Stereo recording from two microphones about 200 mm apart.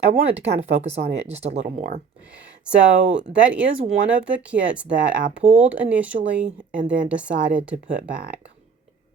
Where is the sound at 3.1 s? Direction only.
5° right (ahead or behind).